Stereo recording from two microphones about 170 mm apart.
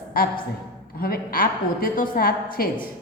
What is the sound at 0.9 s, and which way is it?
A woman's voice, 60° left (ahead or behind).